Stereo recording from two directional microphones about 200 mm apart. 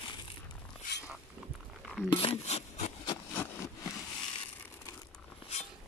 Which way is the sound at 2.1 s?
30° left (ahead or behind).